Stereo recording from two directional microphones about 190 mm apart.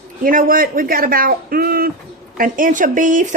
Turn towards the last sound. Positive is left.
turn(degrees=-45)  # may be behind; listen again after turning